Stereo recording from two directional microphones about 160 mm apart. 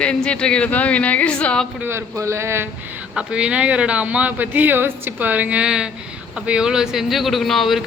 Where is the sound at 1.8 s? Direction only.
15° right (ahead or behind).